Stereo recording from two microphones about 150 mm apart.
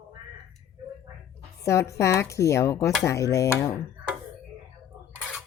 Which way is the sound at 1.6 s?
20° left (ahead or behind).